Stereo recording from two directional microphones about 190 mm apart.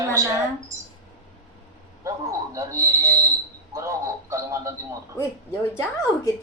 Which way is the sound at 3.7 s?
15° right (ahead or behind).